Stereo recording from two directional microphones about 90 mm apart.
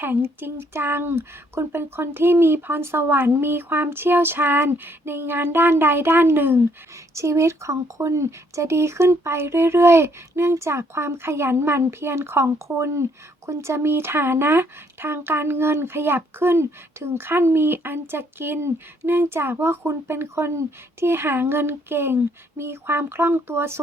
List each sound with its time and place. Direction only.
0.0 s speech: 25° right (ahead or behind)